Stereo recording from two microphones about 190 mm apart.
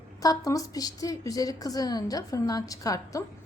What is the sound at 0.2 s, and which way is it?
A woman's voice, 20° left (ahead or behind).